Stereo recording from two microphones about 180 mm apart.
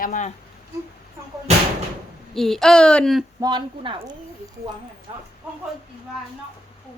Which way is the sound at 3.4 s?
25° right (ahead or behind).